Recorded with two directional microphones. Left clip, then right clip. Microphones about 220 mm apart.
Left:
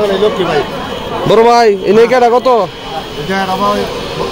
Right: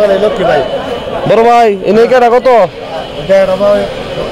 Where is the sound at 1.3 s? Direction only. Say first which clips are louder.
Right 1 dB; centre (ahead or behind).